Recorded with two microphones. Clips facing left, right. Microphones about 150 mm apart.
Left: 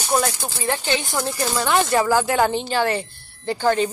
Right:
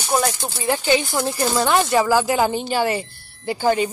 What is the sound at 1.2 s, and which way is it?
Speech, 20° right (ahead or behind).